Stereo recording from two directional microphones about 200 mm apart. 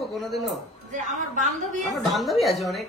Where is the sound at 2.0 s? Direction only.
Centre (ahead or behind).